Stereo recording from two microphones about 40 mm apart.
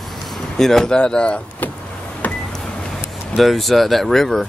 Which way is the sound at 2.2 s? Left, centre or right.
Left.